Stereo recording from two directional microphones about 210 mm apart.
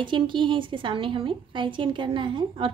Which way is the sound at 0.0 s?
25° right (ahead or behind).